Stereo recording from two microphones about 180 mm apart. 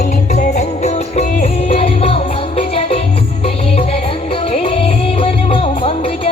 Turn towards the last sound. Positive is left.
turn(degrees=30)  # may be behind; listen again after turning